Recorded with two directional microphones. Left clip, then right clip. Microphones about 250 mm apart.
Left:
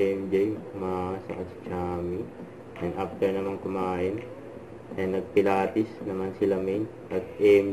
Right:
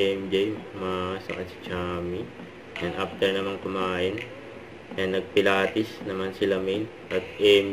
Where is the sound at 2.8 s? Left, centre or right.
Right.